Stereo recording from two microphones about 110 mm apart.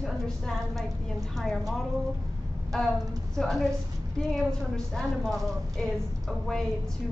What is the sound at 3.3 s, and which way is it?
A woman's voice, centre (ahead or behind).